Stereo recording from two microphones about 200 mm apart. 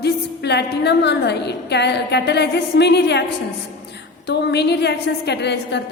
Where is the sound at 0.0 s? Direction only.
55° left (ahead or behind).